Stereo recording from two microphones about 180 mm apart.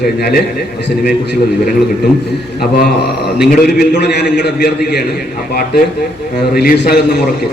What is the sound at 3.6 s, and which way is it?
A man's voice, 60° left (ahead or behind).